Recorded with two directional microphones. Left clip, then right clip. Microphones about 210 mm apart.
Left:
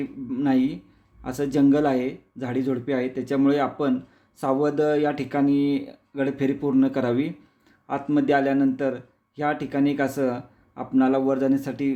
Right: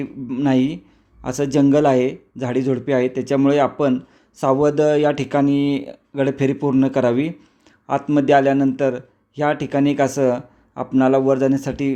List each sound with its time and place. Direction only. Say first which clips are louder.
0.0 s a man's voice: right 4 dB; 20° right (ahead or behind)